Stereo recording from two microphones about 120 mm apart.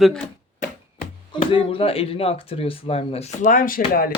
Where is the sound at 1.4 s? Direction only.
50° left (ahead or behind).